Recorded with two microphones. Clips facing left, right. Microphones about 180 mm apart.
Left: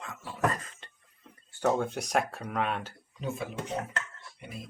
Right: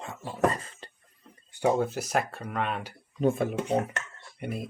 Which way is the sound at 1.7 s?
5° right (ahead or behind).